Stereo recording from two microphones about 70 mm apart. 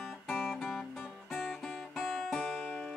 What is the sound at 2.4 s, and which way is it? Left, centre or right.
Music, centre.